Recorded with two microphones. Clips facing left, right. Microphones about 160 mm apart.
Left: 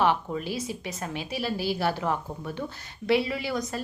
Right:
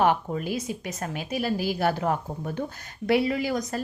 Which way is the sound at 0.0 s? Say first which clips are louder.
Right 2 dB; 45° right (ahead or behind).